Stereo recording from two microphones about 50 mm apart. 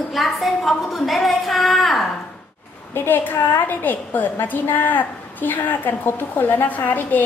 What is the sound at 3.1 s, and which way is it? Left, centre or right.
A woman's voice, left.